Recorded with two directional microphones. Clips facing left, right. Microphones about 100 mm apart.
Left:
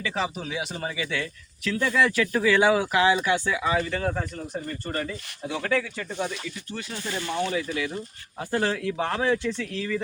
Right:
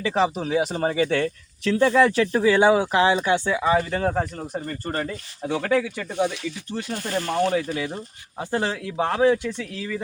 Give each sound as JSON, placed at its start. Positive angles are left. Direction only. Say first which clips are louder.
{"t": 0.0, "sound": "speech", "louder": "right 7 dB", "side_deg": -35}
{"t": 6.1, "sound": "speech", "louder": "right 6 dB", "side_deg": -65}
{"t": 6.9, "sound": "speech", "louder": "right 5 dB", "side_deg": -50}
{"t": 8.4, "sound": "speech", "louder": "right 1 dB", "side_deg": -20}